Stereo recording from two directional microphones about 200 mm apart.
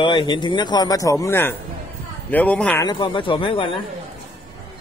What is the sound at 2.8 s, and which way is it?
Speech, 20° left (ahead or behind).